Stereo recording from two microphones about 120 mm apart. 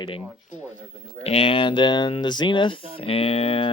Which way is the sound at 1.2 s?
55° left (ahead or behind).